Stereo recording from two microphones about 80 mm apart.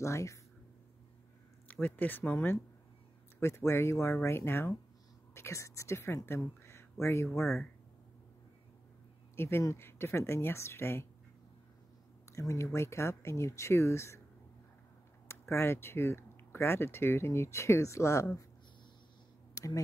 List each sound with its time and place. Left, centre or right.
0.0 s speech: left
1.7 s speech: left
3.3 s speech: left
7.2 s speech: centre
9.4 s speech: left
12.3 s speech: left
15.2 s speech: left
19.5 s a sound: left